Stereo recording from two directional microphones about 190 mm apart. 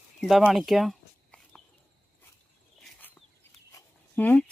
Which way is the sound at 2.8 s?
5° left (ahead or behind).